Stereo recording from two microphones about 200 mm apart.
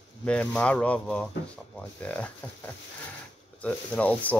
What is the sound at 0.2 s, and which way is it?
Speech, 5° left (ahead or behind).